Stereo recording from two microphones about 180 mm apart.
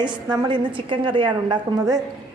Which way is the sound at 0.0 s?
25° right (ahead or behind).